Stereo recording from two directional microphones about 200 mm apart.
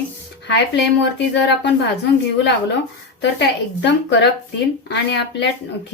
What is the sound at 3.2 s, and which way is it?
Speech, 60° left (ahead or behind).